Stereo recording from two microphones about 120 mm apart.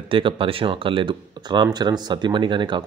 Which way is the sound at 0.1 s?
45° right (ahead or behind).